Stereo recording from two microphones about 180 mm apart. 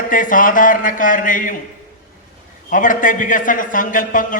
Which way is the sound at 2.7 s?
45° left (ahead or behind).